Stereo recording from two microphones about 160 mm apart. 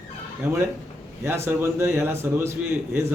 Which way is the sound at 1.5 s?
15° right (ahead or behind).